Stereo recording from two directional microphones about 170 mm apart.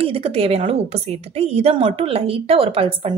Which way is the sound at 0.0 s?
35° right (ahead or behind).